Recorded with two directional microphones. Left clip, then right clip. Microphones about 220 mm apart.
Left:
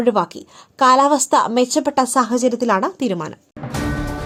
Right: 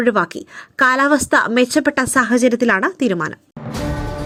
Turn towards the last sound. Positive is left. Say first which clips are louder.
# right 3 dB
turn(degrees=-10)  # may be behind; listen again after turning